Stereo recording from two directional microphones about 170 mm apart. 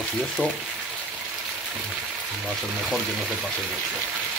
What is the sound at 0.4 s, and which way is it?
Speech, 10° right (ahead or behind).